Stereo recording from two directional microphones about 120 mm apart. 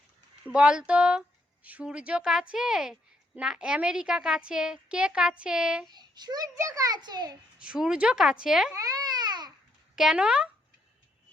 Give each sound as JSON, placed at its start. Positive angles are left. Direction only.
{"t": 0.4, "sound": "a woman's voice", "side_deg": -10}
{"t": 5.9, "sound": "a child's voice", "side_deg": -35}
{"t": 7.6, "sound": "a woman's voice", "side_deg": -10}
{"t": 8.7, "sound": "babbling", "side_deg": -30}
{"t": 9.9, "sound": "a woman's voice", "side_deg": -5}